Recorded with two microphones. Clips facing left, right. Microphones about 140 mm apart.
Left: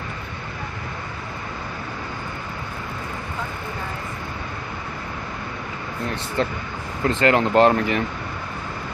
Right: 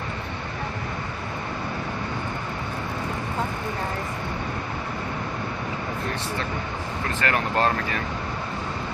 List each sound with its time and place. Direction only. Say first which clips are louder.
7.2 s speech: left 8 dB; 25° left (ahead or behind)